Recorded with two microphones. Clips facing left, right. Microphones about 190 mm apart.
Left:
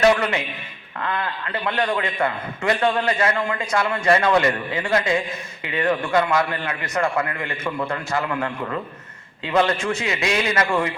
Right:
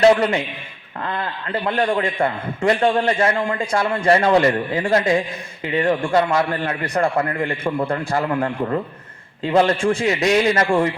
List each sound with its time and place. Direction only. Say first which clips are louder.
0.0 s a man's voice: right 4 dB; 30° right (ahead or behind)